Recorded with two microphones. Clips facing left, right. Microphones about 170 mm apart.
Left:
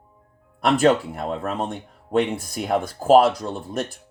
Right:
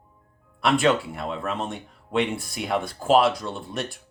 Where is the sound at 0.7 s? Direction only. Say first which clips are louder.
Left 3 dB; 40° left (ahead or behind).